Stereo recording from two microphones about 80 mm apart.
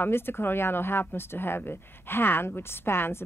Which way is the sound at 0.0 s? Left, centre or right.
Left.